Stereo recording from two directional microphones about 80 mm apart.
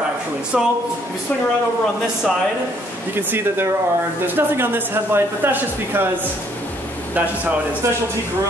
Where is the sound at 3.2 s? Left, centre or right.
Right.